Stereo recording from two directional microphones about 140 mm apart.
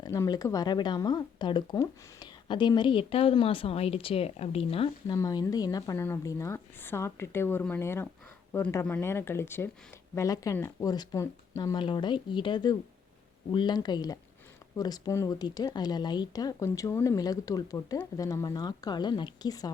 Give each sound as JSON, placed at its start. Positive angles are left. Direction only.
{"t": 0.0, "sound": "speech", "side_deg": 25}
{"t": 5.1, "sound": "speech", "side_deg": 25}